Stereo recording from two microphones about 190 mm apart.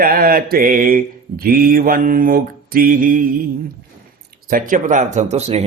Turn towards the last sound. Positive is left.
turn(degrees=-35)  # may be behind; listen again after turning